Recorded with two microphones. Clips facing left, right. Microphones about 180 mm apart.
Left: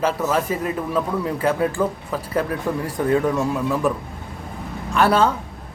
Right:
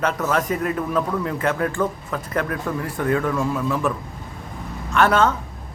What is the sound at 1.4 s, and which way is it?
Speech, 30° left (ahead or behind).